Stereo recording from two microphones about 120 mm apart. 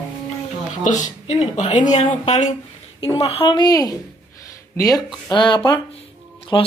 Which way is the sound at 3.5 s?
35° left (ahead or behind).